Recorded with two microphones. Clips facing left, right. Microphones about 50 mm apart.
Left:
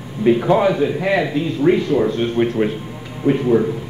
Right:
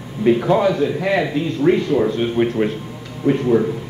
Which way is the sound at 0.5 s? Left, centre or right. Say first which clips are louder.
Left 1 dB; centre.